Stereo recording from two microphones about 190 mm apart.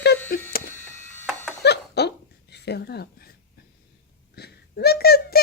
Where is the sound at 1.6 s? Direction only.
60° left (ahead or behind).